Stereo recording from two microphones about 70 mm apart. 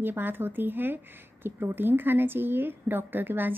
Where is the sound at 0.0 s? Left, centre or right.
Right.